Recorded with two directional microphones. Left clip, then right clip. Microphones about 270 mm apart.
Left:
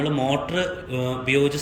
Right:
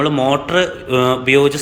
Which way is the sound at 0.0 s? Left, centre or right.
Centre.